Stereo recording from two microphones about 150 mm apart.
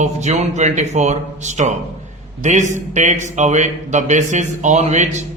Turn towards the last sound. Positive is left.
turn(degrees=-50)  # may be behind; listen again after turning